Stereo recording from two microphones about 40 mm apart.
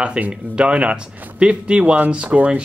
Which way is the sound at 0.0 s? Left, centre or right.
Right.